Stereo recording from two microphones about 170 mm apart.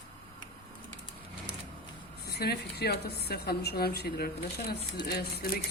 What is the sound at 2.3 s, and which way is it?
A woman's voice, 70° left (ahead or behind).